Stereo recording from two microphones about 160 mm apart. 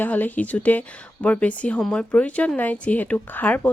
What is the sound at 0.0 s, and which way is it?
A woman's voice, 10° left (ahead or behind).